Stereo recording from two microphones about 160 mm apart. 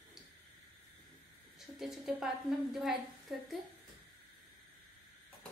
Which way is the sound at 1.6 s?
Centre (ahead or behind).